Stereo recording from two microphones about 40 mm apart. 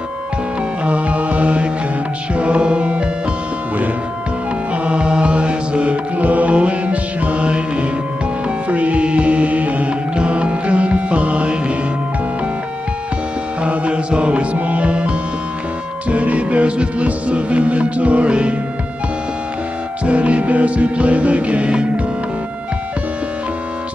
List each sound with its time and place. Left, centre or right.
0.8 s mantra: right
2.3 s music: right
4.8 s mantra: right
8.6 s music: right
13.6 s music: right
20.1 s music: right